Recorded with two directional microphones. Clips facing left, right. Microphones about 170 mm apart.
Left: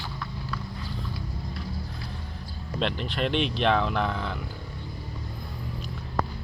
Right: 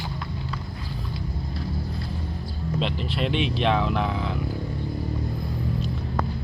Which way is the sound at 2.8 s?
Centre (ahead or behind).